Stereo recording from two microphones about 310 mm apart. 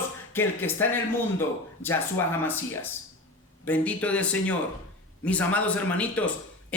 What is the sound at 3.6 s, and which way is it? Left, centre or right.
A man's voice, centre.